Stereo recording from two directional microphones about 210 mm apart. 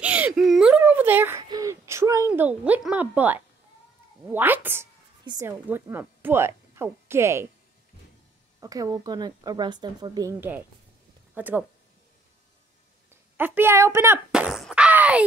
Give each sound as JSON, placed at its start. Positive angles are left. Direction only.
{"t": 0.0, "sound": "whimper", "side_deg": -5}
{"t": 4.3, "sound": "a woman's voice", "side_deg": -10}
{"t": 8.5, "sound": "a woman's voice", "side_deg": -15}
{"t": 13.1, "sound": "a sound", "side_deg": -10}